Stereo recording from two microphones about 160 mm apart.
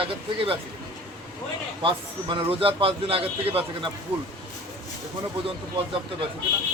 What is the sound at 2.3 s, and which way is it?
A man's voice, 35° right (ahead or behind).